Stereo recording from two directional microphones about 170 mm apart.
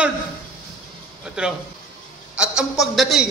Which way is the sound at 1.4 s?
5° right (ahead or behind).